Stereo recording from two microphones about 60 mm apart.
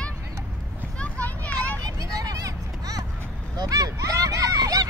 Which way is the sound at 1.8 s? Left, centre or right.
Right.